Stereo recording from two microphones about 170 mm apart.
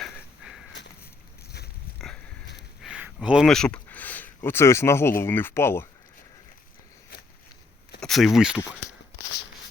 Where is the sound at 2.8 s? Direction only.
5° right (ahead or behind); by 5.8 s 15° left (ahead or behind).